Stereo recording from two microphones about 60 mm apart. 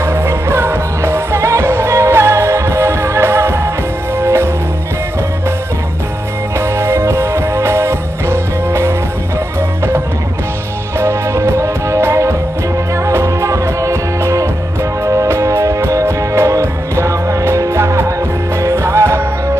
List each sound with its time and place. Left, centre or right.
0.0 s music: right
6.6 s music: right